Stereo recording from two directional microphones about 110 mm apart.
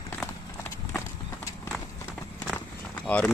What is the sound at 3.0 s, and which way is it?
Speech, 10° left (ahead or behind).